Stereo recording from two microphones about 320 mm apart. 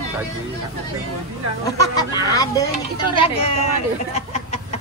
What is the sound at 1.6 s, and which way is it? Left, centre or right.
Speech, centre.